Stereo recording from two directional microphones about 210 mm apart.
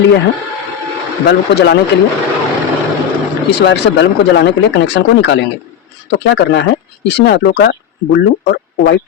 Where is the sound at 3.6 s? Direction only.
55° left (ahead or behind).